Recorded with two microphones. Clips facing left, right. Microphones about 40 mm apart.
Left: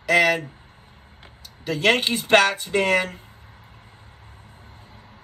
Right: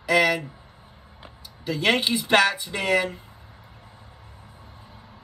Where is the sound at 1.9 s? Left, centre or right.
Left.